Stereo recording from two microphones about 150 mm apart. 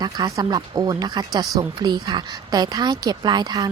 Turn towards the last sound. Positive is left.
turn(degrees=-25)  # may be behind; listen again after turning